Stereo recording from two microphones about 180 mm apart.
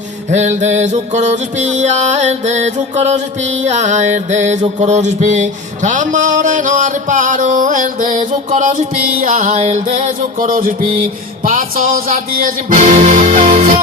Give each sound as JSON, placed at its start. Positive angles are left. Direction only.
{"t": 0.3, "sound": "music", "side_deg": -40}